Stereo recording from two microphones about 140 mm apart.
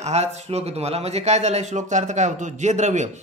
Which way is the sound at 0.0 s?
50° right (ahead or behind).